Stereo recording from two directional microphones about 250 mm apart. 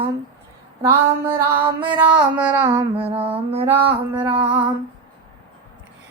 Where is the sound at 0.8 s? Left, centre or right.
Centre.